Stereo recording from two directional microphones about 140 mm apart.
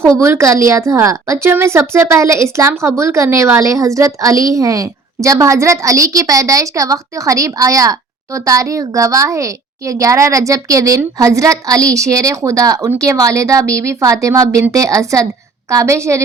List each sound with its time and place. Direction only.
0.2 s a woman's voice: 20° right (ahead or behind)